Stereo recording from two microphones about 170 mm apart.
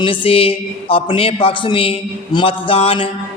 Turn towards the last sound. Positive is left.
turn(degrees=35)  # may be behind; listen again after turning